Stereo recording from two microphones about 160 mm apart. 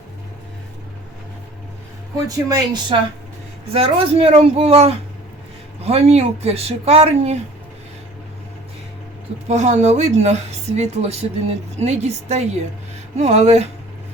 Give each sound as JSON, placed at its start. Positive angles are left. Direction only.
{"t": 2.2, "sound": "speech", "side_deg": -20}
{"t": 2.9, "sound": "speech", "side_deg": -35}
{"t": 9.5, "sound": "a woman's voice", "side_deg": -45}